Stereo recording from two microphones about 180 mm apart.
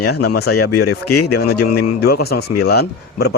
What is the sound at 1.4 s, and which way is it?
A man's voice, 60° left (ahead or behind).